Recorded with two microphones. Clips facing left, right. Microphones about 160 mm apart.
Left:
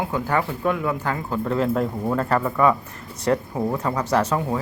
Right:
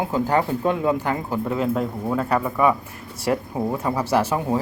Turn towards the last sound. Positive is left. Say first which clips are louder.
# right 1 dB
turn(degrees=-10)  # may be behind; listen again after turning